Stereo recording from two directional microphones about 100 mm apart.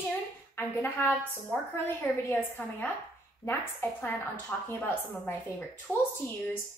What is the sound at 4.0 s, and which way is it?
A woman's voice, 15° left (ahead or behind).